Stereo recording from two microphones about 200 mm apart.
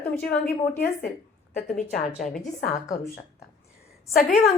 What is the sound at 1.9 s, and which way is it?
Speech, 35° left (ahead or behind).